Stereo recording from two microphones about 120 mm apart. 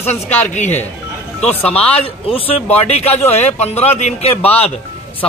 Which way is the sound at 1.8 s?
55° left (ahead or behind).